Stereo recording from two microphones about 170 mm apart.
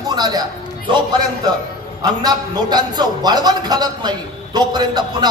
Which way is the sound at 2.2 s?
25° right (ahead or behind).